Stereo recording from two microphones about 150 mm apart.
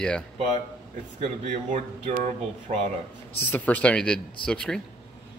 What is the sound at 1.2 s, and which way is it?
Speech, 50° right (ahead or behind).